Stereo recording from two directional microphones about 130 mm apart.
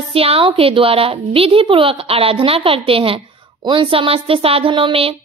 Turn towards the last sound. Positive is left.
turn(degrees=-45)  # may be behind; listen again after turning